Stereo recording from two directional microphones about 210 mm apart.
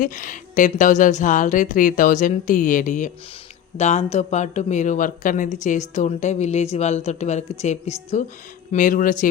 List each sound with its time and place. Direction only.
0.0 s speech: 40° left (ahead or behind)